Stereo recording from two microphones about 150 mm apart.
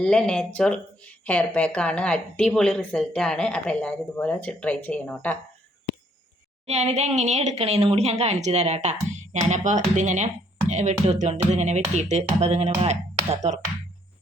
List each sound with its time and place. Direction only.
0.0 s speech: 5° left (ahead or behind)
6.7 s speech: 45° right (ahead or behind)